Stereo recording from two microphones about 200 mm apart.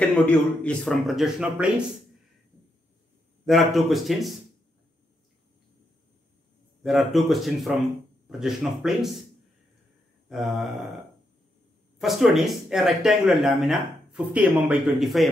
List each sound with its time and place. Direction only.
0.2 s speech: 5° left (ahead or behind)
3.4 s speech: centre (ahead or behind)
6.8 s speech: centre (ahead or behind)
10.3 s speech: centre (ahead or behind)
12.0 s speech: centre (ahead or behind)